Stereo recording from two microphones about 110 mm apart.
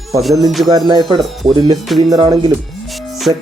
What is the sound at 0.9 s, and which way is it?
Speech, 40° right (ahead or behind).